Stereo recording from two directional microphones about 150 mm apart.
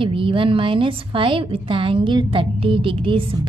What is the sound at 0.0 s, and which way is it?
A woman's voice, 35° right (ahead or behind).